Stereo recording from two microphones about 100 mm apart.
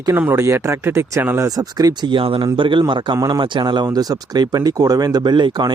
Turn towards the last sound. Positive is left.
turn(degrees=-45)  # may be behind; listen again after turning